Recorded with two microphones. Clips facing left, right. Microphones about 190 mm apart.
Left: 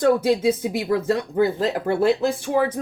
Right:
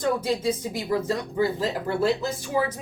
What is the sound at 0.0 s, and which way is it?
Speech, 65° left (ahead or behind).